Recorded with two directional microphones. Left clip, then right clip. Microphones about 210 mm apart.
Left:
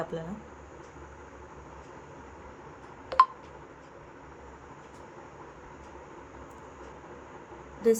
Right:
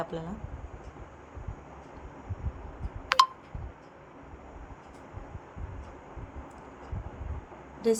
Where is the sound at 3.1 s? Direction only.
50° right (ahead or behind).